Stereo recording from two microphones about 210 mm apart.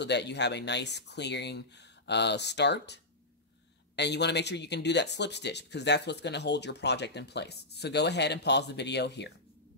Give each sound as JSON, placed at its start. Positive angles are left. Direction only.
{"t": 0.0, "sound": "speech", "side_deg": 55}